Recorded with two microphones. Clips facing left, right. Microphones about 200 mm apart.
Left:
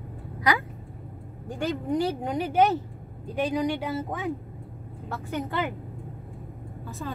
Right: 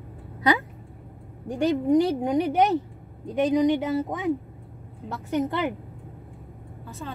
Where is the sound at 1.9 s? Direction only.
15° right (ahead or behind).